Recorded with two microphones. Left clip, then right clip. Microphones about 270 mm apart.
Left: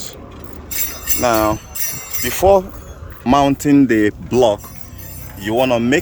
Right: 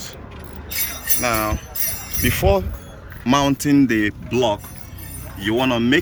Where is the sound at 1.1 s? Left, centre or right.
Left.